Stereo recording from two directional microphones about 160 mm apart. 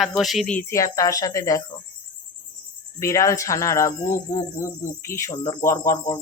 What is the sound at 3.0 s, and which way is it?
Speech, 20° left (ahead or behind).